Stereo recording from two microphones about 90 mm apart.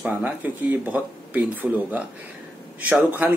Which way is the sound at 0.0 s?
20° right (ahead or behind).